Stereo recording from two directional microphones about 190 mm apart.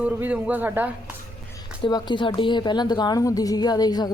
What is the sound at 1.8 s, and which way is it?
A woman's voice, 20° left (ahead or behind).